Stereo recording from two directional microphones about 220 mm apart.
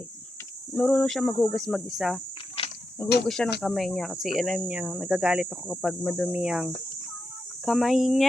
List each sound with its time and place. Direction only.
0.7 s speech: 5° left (ahead or behind)
2.6 s insect: 25° left (ahead or behind)
3.2 s speech: 5° left (ahead or behind)